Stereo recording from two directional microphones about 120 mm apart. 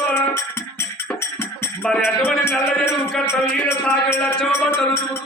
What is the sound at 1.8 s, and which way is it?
Music, 5° left (ahead or behind).